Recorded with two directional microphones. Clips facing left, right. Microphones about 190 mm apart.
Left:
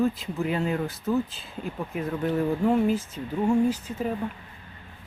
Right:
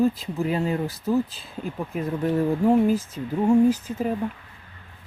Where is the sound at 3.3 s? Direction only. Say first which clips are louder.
Right 4 dB; 20° right (ahead or behind).